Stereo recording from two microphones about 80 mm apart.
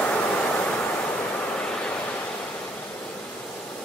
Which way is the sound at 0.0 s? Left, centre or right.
Centre.